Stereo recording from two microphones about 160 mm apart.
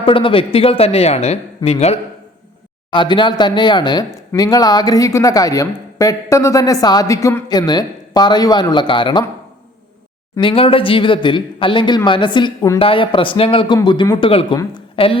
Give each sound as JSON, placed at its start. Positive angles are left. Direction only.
{"t": 0.0, "sound": "speech", "side_deg": 35}
{"t": 2.9, "sound": "speech", "side_deg": 30}
{"t": 10.4, "sound": "a woman's voice", "side_deg": 35}